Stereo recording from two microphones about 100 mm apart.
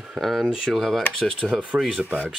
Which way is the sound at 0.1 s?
Centre (ahead or behind).